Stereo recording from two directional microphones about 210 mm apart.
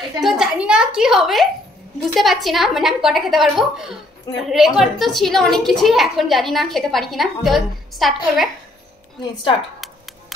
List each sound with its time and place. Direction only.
0.2 s a woman's voice: centre (ahead or behind)
9.2 s speech: 25° left (ahead or behind)